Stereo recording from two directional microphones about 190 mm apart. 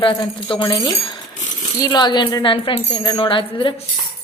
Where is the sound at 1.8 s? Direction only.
20° left (ahead or behind).